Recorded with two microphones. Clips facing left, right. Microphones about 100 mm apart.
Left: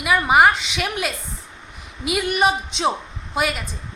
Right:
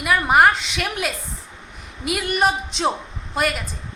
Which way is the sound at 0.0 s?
Centre (ahead or behind).